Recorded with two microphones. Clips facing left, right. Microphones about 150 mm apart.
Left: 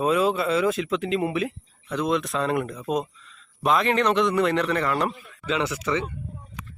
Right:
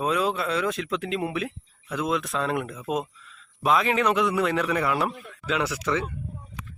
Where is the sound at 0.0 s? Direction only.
Centre (ahead or behind).